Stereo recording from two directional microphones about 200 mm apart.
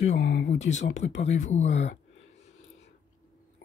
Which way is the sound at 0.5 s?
35° left (ahead or behind).